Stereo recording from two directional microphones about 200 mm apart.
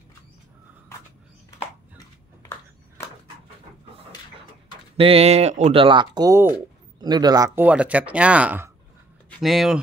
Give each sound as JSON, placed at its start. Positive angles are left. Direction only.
{"t": 4.9, "sound": "speech", "side_deg": -30}